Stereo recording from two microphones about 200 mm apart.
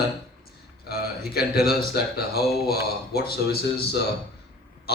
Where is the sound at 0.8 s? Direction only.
50° left (ahead or behind).